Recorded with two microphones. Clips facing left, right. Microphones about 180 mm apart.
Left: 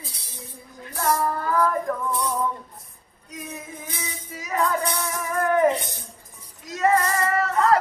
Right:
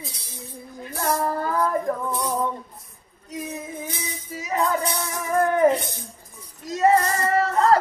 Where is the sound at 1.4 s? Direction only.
25° right (ahead or behind).